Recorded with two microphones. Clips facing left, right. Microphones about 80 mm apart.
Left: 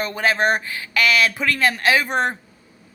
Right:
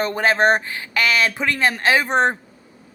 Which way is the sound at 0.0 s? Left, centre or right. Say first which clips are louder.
Right 3 dB; right.